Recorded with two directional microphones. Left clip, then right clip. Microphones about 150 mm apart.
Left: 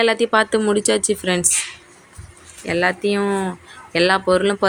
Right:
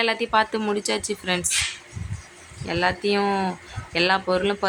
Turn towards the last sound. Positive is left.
turn(degrees=20)  # may be behind; listen again after turning